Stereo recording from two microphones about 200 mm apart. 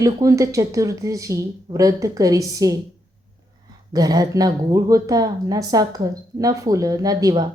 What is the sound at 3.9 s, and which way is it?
Speech, 20° right (ahead or behind).